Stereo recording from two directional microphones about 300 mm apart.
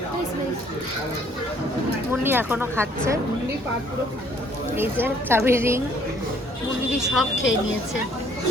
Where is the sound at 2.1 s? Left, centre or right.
Centre.